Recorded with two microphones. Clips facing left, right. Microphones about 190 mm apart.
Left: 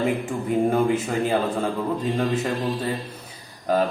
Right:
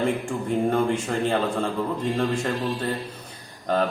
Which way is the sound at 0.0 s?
5° left (ahead or behind).